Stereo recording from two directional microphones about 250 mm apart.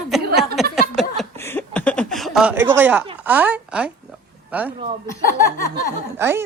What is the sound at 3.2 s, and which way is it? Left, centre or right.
Speech, centre.